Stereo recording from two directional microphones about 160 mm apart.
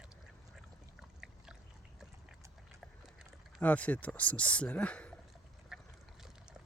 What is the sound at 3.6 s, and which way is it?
Speech, 10° left (ahead or behind).